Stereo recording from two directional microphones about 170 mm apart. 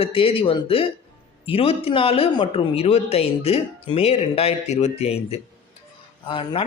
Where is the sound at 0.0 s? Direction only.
35° left (ahead or behind).